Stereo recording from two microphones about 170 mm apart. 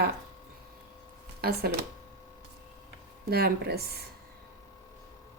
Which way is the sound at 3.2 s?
65° right (ahead or behind).